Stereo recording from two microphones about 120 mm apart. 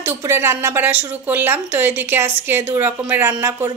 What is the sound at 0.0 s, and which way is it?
A woman's voice, 20° right (ahead or behind).